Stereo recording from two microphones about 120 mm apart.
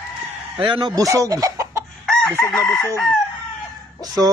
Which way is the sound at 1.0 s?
30° right (ahead or behind).